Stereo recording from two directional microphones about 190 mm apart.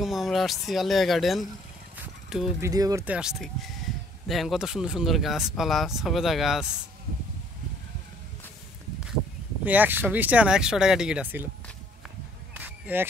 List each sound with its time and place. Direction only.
0.0 s speech: centre (ahead or behind)
2.0 s a sound: centre (ahead or behind)
2.6 s speech: 20° right (ahead or behind)
3.1 s speech: 5° right (ahead or behind)
9.7 s speech: 10° right (ahead or behind)
12.5 s single-lens reflex camera: 10° right (ahead or behind)